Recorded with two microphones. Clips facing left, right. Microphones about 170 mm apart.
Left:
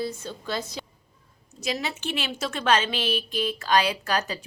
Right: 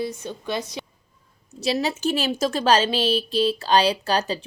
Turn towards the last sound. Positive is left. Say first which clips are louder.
# right 4 dB
turn(degrees=-30)  # may be behind; listen again after turning